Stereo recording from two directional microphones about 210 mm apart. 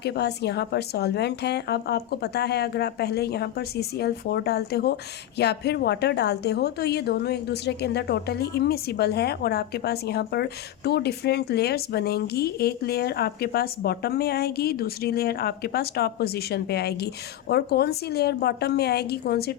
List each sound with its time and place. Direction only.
0.0 s speech: 55° left (ahead or behind)